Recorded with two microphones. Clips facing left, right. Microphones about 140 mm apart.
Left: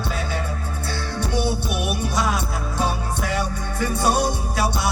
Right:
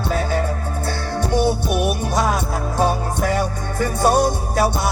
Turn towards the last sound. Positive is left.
turn(degrees=-45)  # may be behind; listen again after turning